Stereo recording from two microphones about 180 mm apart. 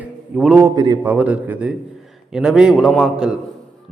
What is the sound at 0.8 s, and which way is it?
Speech, 20° right (ahead or behind).